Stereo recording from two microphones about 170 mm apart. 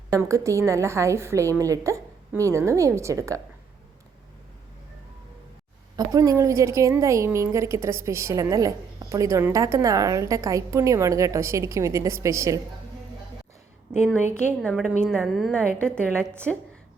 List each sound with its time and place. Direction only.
0.1 s a woman's voice: 20° right (ahead or behind)
6.0 s a woman's voice: 20° right (ahead or behind)
14.6 s a woman's voice: centre (ahead or behind)